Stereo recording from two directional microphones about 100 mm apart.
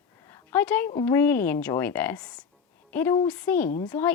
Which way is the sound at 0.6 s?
15° left (ahead or behind).